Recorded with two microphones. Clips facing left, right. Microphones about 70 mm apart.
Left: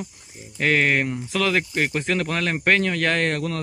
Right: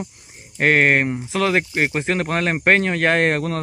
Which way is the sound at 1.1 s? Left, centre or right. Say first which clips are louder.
Right 3 dB; right.